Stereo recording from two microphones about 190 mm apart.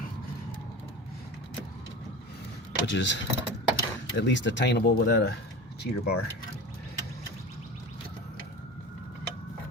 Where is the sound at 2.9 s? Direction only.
70° left (ahead or behind).